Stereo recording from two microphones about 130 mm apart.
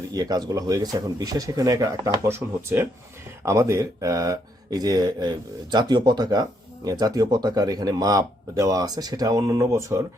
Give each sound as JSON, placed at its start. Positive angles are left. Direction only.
{"t": 0.1, "sound": "speech", "side_deg": -30}